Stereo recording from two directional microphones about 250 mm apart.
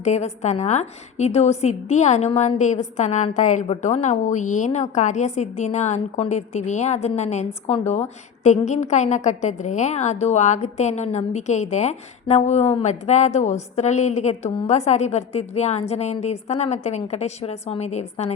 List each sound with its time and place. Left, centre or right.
0.0 s a woman's voice: left